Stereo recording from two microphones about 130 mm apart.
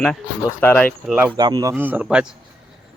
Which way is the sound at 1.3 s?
30° right (ahead or behind).